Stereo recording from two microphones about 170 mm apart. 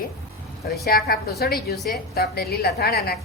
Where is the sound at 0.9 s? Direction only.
65° left (ahead or behind).